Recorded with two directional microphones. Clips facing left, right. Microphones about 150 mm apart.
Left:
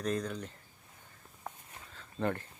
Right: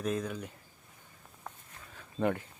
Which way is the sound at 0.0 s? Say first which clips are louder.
Right 1 dB; 5° right (ahead or behind).